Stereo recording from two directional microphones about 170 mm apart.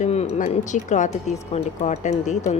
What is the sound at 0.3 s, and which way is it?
A woman's voice, 45° left (ahead or behind).